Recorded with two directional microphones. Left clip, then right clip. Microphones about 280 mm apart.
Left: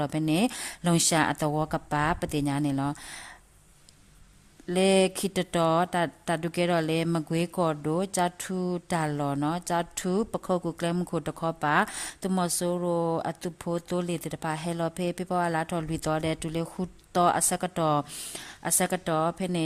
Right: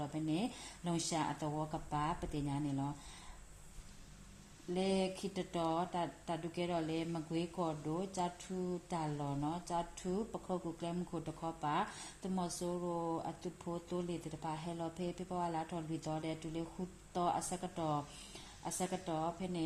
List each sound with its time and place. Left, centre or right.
0.0 s speech: left
4.7 s speech: left